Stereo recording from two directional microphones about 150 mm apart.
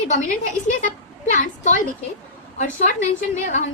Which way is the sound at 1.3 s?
55° left (ahead or behind).